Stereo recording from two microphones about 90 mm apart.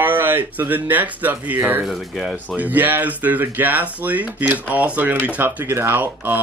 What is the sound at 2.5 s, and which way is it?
Speech, 20° right (ahead or behind).